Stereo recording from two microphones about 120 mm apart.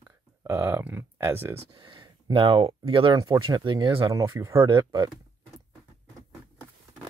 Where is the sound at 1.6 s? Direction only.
40° right (ahead or behind).